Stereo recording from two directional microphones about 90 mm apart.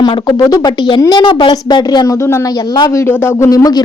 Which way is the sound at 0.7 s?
55° left (ahead or behind).